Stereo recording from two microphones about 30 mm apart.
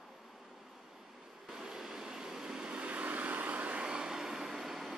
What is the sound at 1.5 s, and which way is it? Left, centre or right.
Vehicle, right.